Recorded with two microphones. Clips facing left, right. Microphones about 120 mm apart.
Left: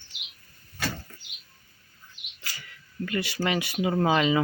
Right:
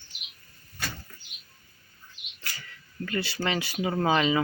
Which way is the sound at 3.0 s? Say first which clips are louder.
Left 1 dB; 30° right (ahead or behind).